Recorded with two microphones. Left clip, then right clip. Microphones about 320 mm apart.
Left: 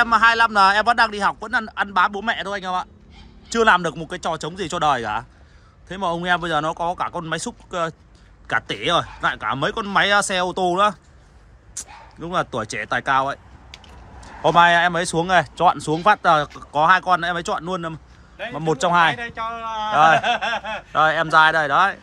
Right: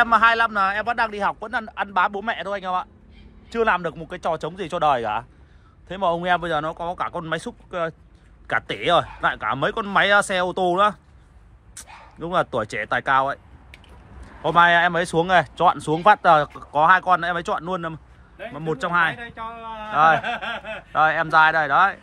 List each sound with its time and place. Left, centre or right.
0.0 s a man's voice: centre
19.1 s speech: left
19.9 s a man's voice: centre
20.2 s speech: centre
20.9 s a man's voice: centre